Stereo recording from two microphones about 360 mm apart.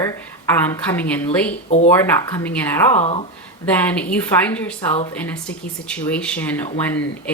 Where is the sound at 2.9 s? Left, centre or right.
Centre.